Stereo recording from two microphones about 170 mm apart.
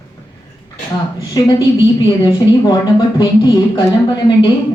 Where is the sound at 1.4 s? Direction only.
25° left (ahead or behind).